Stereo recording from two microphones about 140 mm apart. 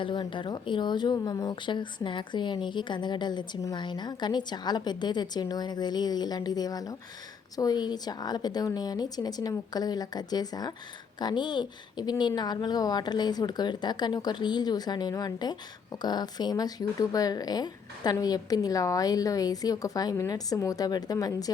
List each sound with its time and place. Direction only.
0.0 s a woman's voice: 35° left (ahead or behind)